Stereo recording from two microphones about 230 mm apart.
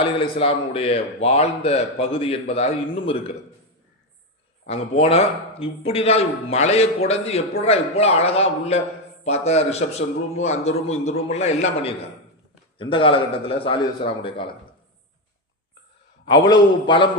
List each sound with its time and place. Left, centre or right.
0.0 s a man's voice: left
4.6 s a man's voice: left
16.2 s a man's voice: centre